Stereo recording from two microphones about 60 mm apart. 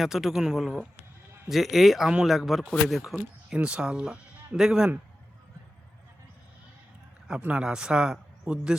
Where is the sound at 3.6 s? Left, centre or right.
Centre.